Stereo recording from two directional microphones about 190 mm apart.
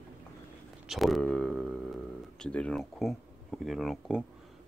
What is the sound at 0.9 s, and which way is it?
Speech, centre (ahead or behind).